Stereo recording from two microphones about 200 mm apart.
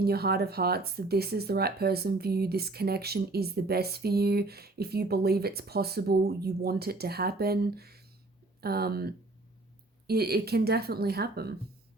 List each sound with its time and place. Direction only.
0.0 s speech: 50° right (ahead or behind)